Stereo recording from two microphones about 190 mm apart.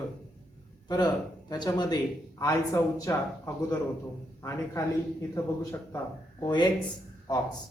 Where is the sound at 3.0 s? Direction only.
15° left (ahead or behind).